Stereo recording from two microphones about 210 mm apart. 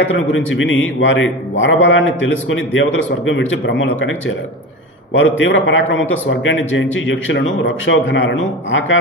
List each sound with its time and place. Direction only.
0.1 s a man's voice: 65° left (ahead or behind)
5.1 s a man's voice: 65° left (ahead or behind)